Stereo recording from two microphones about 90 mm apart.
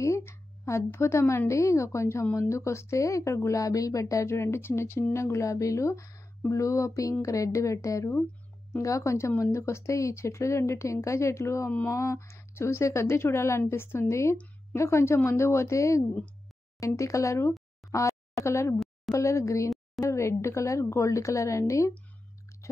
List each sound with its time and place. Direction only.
0.0 s a sound: 30° left (ahead or behind)
1.5 s speech: 35° left (ahead or behind)
11.7 s a woman's voice: 20° left (ahead or behind)
12.0 s a woman's voice: 35° left (ahead or behind)
14.3 s a sound: 15° left (ahead or behind)
14.8 s speech: 30° left (ahead or behind)